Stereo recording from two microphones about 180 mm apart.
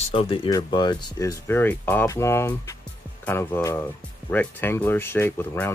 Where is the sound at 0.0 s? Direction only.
30° left (ahead or behind).